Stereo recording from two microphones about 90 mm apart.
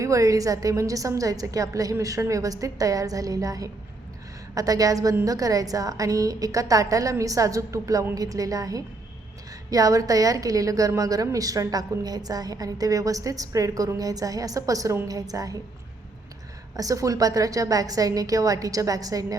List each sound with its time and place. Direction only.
0.0 s a woman's voice: 35° right (ahead or behind)
16.7 s a woman's voice: 40° right (ahead or behind)